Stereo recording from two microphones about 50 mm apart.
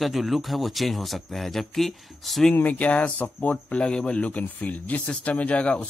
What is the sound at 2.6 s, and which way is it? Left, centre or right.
Speech, left.